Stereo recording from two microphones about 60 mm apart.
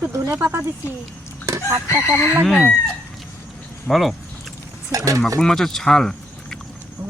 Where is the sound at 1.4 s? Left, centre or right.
Right.